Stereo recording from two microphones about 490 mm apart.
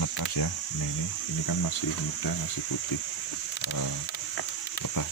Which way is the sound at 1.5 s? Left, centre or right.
Left.